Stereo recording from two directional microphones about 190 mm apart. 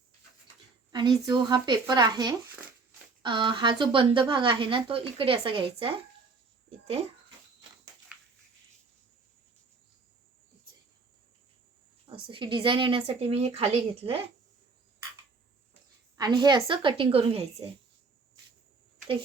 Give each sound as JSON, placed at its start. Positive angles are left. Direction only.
{"t": 0.9, "sound": "a sound", "side_deg": -20}
{"t": 1.3, "sound": "a child's voice", "side_deg": -25}
{"t": 12.0, "sound": "speech", "side_deg": -25}
{"t": 16.1, "sound": "speech", "side_deg": -20}